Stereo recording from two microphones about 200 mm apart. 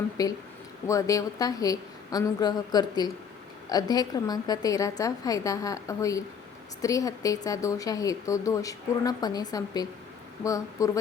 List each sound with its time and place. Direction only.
0.2 s speech: 20° left (ahead or behind)